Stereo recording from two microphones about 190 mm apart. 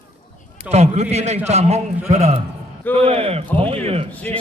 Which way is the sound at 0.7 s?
35° right (ahead or behind).